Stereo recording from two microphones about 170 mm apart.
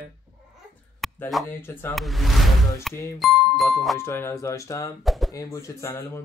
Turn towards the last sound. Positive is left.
turn(degrees=15)  # may be behind; listen again after turning